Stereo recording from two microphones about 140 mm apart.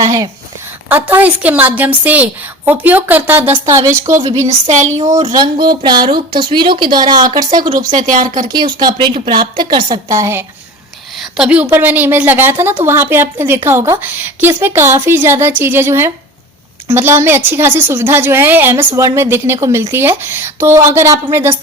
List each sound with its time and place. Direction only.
0.0 s a woman's voice: 25° right (ahead or behind)
0.9 s a woman's voice: 15° right (ahead or behind)
4.6 s child singing: 55° right (ahead or behind)
5.3 s a woman's voice: 30° right (ahead or behind)
7.9 s speech: 70° right (ahead or behind)
8.5 s a woman's voice: 30° right (ahead or behind)
11.1 s a woman's voice: centre (ahead or behind); by 21.5 s 20° right (ahead or behind)